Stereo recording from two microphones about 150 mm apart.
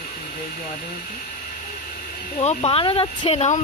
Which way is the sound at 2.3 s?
40° left (ahead or behind).